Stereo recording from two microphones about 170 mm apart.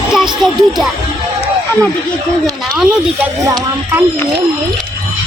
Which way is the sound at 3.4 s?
20° right (ahead or behind).